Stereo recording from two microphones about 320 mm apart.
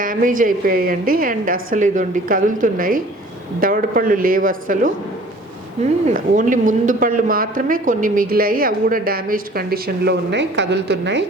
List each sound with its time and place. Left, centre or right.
0.0 s speech: right
6.1 s speech: right